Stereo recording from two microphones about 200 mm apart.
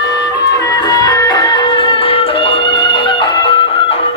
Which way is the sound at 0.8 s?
20° left (ahead or behind).